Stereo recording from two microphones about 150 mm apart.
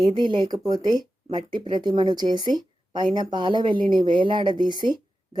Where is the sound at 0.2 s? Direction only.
30° right (ahead or behind).